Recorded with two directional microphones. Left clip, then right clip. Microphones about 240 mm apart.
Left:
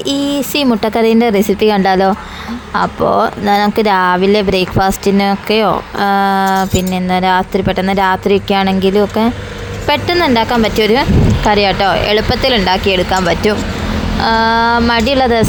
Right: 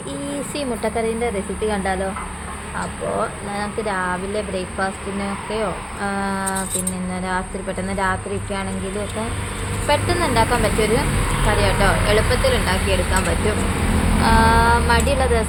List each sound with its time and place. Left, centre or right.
0.0 s speech: left